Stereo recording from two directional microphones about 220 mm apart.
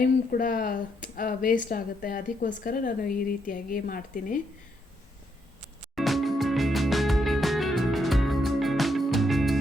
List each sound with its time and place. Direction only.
0.0 s speech: 40° left (ahead or behind)
6.0 s music: centre (ahead or behind)